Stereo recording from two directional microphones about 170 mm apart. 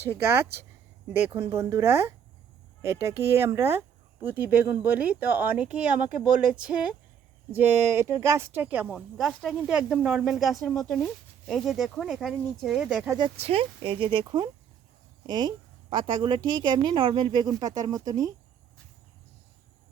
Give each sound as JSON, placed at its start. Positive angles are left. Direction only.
{"t": 0.0, "sound": "speech", "side_deg": -15}
{"t": 13.1, "sound": "a woman's voice", "side_deg": -30}